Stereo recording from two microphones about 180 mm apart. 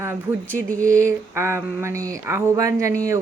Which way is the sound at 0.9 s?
15° right (ahead or behind).